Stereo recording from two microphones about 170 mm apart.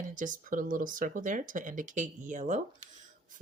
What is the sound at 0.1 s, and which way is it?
Speech, 50° right (ahead or behind).